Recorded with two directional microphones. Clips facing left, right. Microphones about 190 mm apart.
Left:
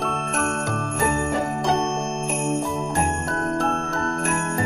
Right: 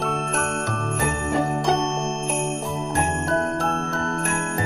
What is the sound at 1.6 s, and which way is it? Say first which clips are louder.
Jingle bell: even; centre (ahead or behind).